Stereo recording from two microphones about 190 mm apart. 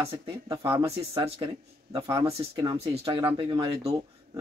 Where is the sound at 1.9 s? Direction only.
15° right (ahead or behind).